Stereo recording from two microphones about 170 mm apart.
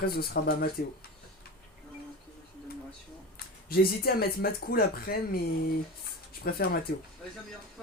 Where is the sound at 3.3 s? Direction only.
65° left (ahead or behind).